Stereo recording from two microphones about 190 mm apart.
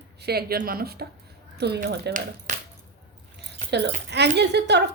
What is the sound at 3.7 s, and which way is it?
Speech, 65° right (ahead or behind).